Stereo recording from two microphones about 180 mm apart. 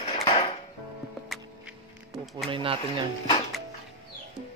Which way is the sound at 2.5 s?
30° right (ahead or behind).